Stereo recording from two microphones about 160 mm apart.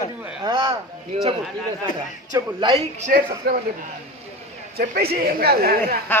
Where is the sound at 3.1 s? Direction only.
70° right (ahead or behind).